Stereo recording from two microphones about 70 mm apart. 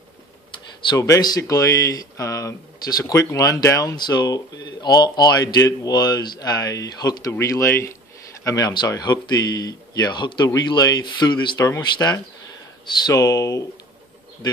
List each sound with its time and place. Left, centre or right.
0.8 s speech: left
2.9 s speech: left
3.9 s speech: left
7.3 s speech: left
8.5 s speech: left
11.8 s speech: left
13.1 s speech: left